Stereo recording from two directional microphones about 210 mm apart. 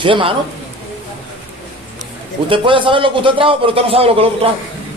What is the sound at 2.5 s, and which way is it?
A man's voice, 25° right (ahead or behind).